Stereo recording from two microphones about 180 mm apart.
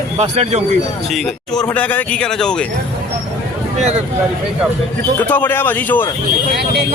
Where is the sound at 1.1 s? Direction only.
5° left (ahead or behind).